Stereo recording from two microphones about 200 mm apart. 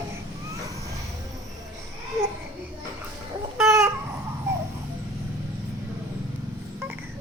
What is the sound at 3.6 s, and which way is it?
Chicken, 15° right (ahead or behind).